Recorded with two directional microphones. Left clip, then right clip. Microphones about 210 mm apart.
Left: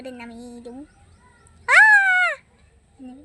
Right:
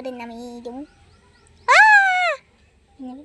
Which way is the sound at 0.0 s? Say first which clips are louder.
Right 5 dB; 20° right (ahead or behind).